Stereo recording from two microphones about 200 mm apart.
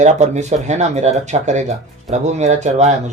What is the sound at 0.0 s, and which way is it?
Speech, 35° right (ahead or behind).